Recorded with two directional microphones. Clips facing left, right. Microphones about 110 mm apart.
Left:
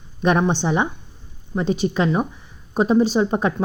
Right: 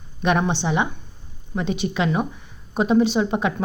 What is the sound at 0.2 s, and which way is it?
Speech, 30° left (ahead or behind).